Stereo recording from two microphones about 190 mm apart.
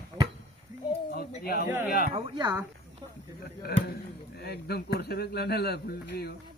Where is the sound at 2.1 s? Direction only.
25° right (ahead or behind).